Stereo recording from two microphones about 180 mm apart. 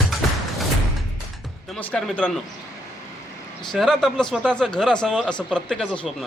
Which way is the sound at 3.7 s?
Centre (ahead or behind).